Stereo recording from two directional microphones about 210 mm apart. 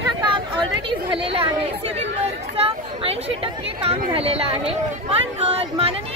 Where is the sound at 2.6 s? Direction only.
25° right (ahead or behind).